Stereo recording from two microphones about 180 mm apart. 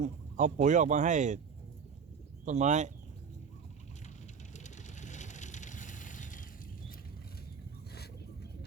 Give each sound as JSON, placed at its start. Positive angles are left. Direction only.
{"t": 0.0, "sound": "speech", "side_deg": -45}
{"t": 2.4, "sound": "speech", "side_deg": -40}
{"t": 4.5, "sound": "vehicle", "side_deg": 40}